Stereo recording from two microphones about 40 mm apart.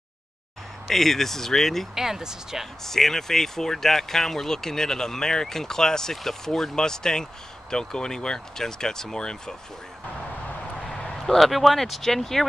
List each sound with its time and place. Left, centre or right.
0.8 s speech: centre
2.0 s speech: centre
2.8 s speech: centre
11.0 s a sound: left
11.2 s speech: centre